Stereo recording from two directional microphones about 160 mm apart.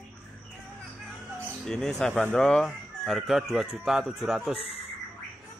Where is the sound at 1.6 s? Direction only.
5° left (ahead or behind).